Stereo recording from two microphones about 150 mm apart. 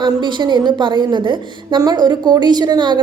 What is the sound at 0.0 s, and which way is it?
A woman's voice, 30° right (ahead or behind).